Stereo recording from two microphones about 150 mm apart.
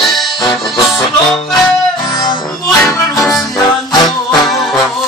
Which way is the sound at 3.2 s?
Centre (ahead or behind).